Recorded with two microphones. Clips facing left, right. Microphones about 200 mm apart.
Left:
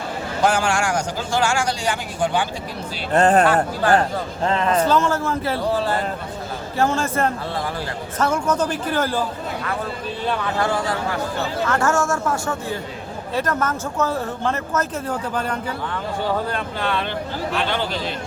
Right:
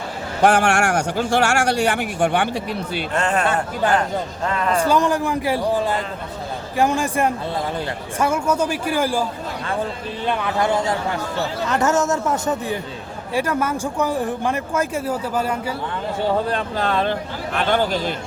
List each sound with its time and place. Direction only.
0.4 s speech: 65° right (ahead or behind)
3.1 s speech: 35° left (ahead or behind)
4.4 s a man's voice: 25° left (ahead or behind)
4.8 s speech: 15° right (ahead or behind)
10.2 s speech: 20° right (ahead or behind)
16.5 s speech: 35° right (ahead or behind)